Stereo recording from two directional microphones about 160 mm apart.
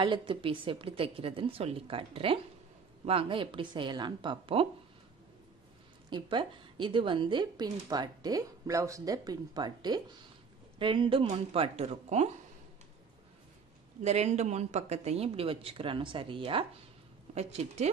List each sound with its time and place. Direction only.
0.0 s speech: 30° right (ahead or behind)
6.0 s a woman's voice: 30° right (ahead or behind)
14.0 s a woman's voice: 45° right (ahead or behind)